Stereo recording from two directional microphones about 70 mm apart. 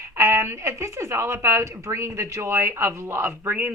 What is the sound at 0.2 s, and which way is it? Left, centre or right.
A woman's voice, right.